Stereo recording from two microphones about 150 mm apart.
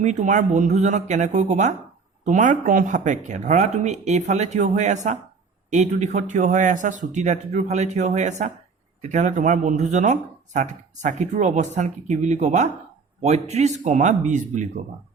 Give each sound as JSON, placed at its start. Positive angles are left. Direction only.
{"t": 0.0, "sound": "speech", "side_deg": -55}